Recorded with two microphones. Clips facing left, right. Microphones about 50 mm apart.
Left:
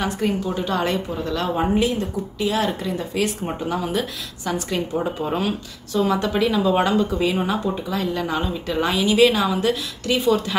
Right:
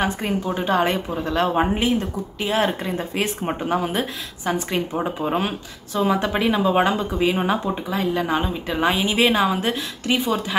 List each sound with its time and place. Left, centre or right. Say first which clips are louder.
0.0 s a woman's voice: even; right